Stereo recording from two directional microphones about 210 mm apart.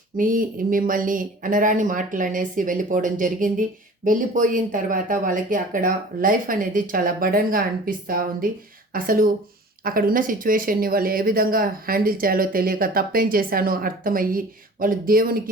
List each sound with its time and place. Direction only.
0.2 s speech: 40° right (ahead or behind)